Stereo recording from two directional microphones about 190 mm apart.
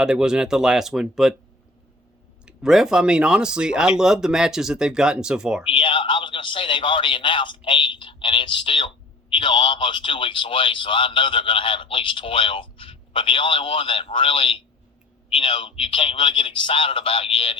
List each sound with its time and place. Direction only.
0.0 s speech: 5° right (ahead or behind)
2.5 s speech: 5° right (ahead or behind)
5.7 s a man's voice: 30° left (ahead or behind)